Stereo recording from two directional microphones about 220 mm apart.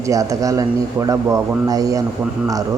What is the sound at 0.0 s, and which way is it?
A man's voice, 15° right (ahead or behind).